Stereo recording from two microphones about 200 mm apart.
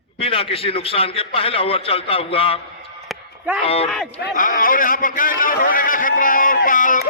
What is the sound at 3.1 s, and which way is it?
Chop, 5° right (ahead or behind).